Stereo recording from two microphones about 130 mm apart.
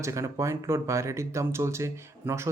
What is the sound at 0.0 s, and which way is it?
Speech, 25° right (ahead or behind).